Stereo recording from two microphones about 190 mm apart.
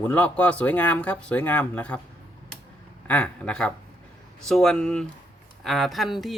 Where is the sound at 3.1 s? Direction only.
5° left (ahead or behind).